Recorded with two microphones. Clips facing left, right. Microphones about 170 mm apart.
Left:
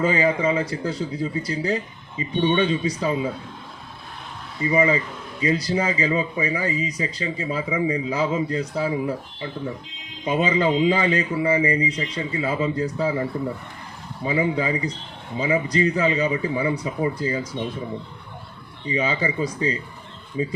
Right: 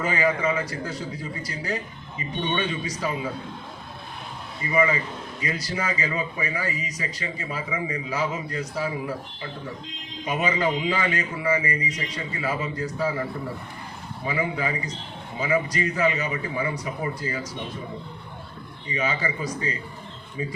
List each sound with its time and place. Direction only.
0.0 s speech: 30° left (ahead or behind)
4.6 s speech: 25° left (ahead or behind)
14.3 s speech: 25° left (ahead or behind)
18.9 s speech: 30° left (ahead or behind)